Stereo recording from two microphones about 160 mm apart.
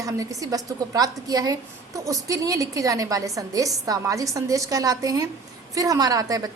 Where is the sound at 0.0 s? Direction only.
20° right (ahead or behind).